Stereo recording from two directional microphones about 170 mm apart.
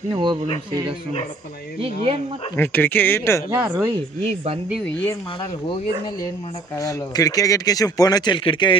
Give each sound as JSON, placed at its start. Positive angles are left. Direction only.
{"t": 0.1, "sound": "speech", "side_deg": -30}
{"t": 2.5, "sound": "speech", "side_deg": 10}
{"t": 3.5, "sound": "speech", "side_deg": -10}
{"t": 6.8, "sound": "speech", "side_deg": 20}